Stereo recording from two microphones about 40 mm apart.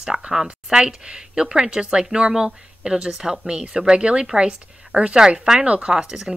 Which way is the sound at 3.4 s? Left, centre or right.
Right.